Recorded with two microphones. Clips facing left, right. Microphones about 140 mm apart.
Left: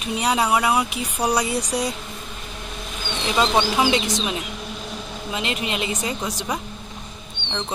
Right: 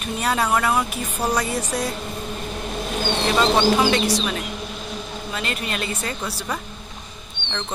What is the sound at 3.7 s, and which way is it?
Speech, 15° left (ahead or behind).